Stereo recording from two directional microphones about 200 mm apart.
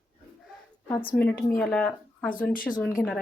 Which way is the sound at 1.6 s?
5° left (ahead or behind).